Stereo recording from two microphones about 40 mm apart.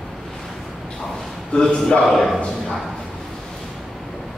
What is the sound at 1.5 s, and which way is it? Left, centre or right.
Speech, left.